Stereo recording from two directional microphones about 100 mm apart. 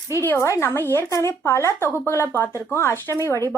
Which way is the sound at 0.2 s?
25° left (ahead or behind).